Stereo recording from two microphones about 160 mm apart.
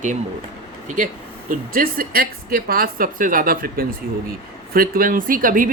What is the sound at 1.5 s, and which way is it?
Speech, 60° right (ahead or behind).